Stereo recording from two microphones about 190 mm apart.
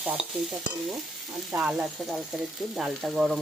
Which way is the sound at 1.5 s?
5° right (ahead or behind).